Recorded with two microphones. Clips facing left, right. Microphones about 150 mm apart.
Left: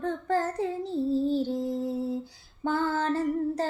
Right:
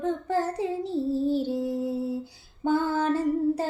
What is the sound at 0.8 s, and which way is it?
Child singing, 20° left (ahead or behind).